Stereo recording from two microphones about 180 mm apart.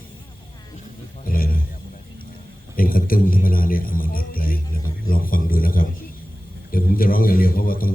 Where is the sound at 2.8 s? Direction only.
55° left (ahead or behind).